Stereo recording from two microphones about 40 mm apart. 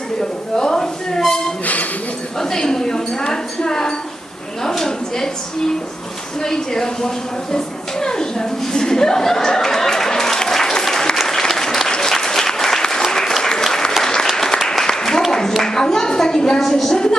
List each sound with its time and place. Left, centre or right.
0.5 s a sound: centre
1.6 s a sound: left
2.4 s a woman's voice: centre
6.4 s a woman's voice: centre
7.5 s chuckle: centre
11.2 s applause: centre
15.3 s a sound: centre
15.6 s a woman's voice: centre
16.9 s a woman's voice: centre